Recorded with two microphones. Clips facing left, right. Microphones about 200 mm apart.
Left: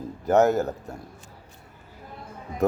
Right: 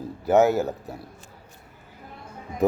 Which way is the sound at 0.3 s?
5° right (ahead or behind).